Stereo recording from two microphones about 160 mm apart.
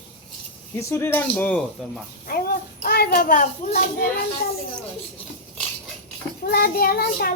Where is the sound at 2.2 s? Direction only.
70° left (ahead or behind).